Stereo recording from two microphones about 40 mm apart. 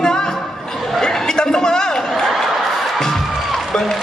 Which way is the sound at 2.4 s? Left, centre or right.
Centre.